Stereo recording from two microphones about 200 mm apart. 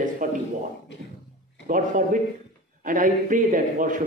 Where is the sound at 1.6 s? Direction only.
40° right (ahead or behind).